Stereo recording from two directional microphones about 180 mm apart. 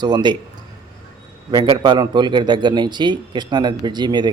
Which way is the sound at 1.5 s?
25° right (ahead or behind).